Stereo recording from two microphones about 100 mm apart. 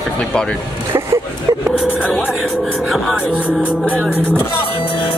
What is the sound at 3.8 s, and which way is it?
Music, 5° left (ahead or behind).